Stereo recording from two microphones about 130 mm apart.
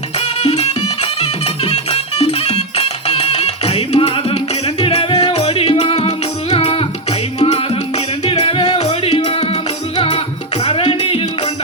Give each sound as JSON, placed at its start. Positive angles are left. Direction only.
{"t": 0.4, "sound": "music", "side_deg": 55}
{"t": 10.6, "sound": "music", "side_deg": 45}